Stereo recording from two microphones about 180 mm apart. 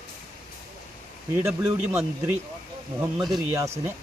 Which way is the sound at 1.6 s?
15° right (ahead or behind).